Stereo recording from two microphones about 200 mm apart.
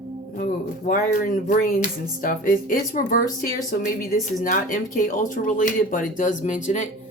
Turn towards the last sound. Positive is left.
turn(degrees=40)  # may be behind; listen again after turning